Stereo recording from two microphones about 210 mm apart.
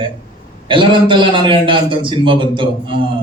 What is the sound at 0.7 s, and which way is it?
A man's voice, 25° right (ahead or behind).